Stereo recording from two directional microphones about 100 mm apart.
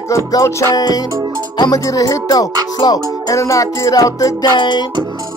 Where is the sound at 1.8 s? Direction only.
35° left (ahead or behind).